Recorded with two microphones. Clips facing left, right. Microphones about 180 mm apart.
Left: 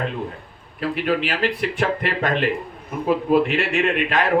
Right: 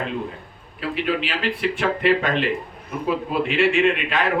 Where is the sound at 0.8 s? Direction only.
45° left (ahead or behind).